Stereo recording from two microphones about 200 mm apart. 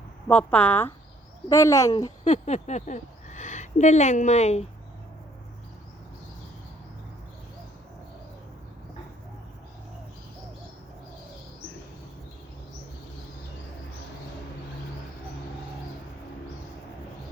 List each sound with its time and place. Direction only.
0.3 s a woman's voice: 5° left (ahead or behind)
2.2 s speech: 35° left (ahead or behind)